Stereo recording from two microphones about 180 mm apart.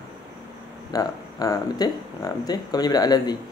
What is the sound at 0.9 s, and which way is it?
Speech, 20° left (ahead or behind).